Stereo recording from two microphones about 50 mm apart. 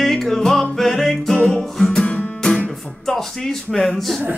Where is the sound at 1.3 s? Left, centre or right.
Centre.